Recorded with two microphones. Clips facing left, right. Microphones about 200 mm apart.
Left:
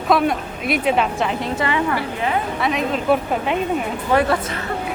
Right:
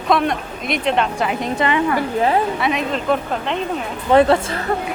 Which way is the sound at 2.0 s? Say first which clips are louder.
Right 5 dB; 35° right (ahead or behind).